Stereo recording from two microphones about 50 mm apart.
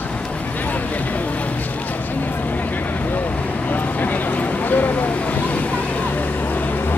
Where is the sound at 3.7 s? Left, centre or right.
Left.